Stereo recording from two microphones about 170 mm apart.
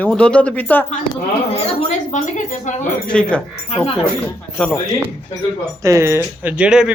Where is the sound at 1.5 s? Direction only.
45° left (ahead or behind).